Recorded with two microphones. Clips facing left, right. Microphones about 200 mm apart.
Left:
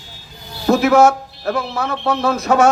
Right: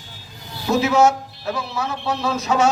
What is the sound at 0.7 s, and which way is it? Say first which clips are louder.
A man's voice: left 4 dB; 55° left (ahead or behind).